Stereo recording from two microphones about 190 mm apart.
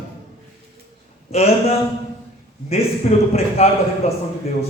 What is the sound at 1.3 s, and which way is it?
Speech, 35° left (ahead or behind).